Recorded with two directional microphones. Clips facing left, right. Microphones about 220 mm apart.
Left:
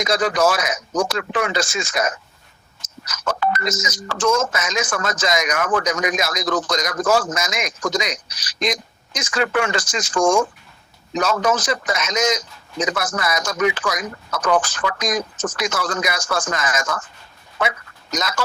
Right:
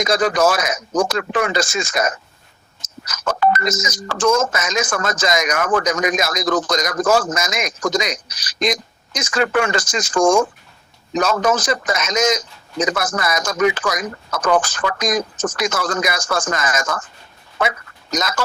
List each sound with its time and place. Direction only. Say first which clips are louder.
0.0 s speech: right 2 dB; 45° right (ahead or behind)